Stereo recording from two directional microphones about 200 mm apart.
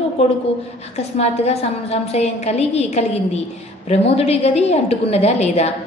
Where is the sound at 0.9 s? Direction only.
30° left (ahead or behind).